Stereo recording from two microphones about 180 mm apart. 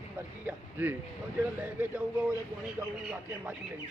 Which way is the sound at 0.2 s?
10° right (ahead or behind).